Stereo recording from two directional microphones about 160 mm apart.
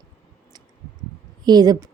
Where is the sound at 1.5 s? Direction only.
25° right (ahead or behind).